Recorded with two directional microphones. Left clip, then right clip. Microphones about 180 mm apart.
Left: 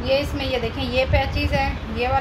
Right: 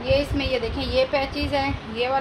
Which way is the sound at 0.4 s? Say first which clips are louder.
Left 1 dB; 35° right (ahead or behind).